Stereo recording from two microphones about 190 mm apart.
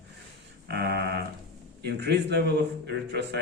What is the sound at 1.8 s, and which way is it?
A man's voice, 60° right (ahead or behind).